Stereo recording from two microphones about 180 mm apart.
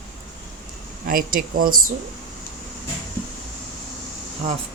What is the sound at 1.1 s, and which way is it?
Speech, 50° right (ahead or behind).